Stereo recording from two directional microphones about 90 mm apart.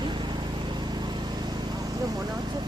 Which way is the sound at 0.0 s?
55° right (ahead or behind).